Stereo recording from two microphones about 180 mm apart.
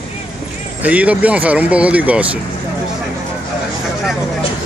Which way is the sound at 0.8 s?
10° right (ahead or behind).